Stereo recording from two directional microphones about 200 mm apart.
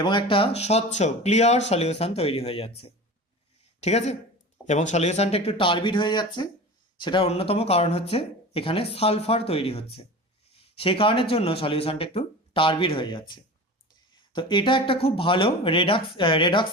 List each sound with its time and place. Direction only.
0.0 s speech: 25° left (ahead or behind)